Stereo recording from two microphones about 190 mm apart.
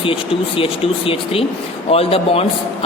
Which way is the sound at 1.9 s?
30° left (ahead or behind).